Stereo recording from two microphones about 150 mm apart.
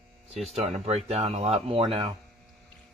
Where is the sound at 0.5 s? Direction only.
50° right (ahead or behind).